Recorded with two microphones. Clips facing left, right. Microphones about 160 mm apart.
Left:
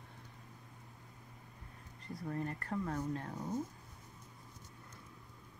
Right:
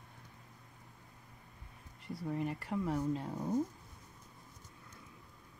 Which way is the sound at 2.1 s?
10° right (ahead or behind).